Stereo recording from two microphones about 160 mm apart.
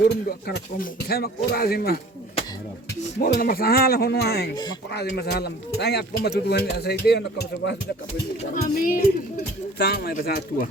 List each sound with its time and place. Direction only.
0.1 s speech: 80° left
3.2 s a man's voice: 65° left (ahead or behind); by 7.8 s 90° left
8.6 s a woman's voice: 60° left (ahead or behind)
9.7 s speech: 85° left; by 10.7 s 65° left (ahead or behind)